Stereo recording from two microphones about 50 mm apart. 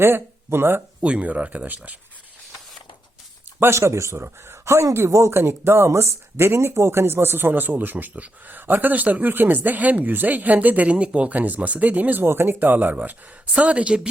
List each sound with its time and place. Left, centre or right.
0.0 s speech: right
1.0 s speech: right
3.6 s speech: right
4.2 s speech: right
10.9 s speech: right
12.2 s speech: right